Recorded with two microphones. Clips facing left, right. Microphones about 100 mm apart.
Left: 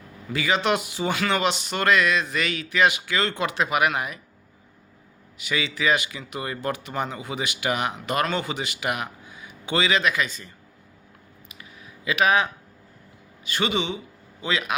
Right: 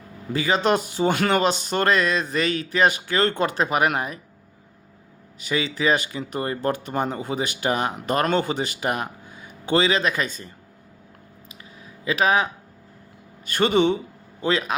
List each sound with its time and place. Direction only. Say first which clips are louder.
0.3 s speech: right 2 dB; 35° right (ahead or behind)
5.4 s speech: right 3 dB; 35° right (ahead or behind)
12.0 s speech: right 1 dB; 30° right (ahead or behind)
13.4 s speech: right 7 dB; 50° right (ahead or behind)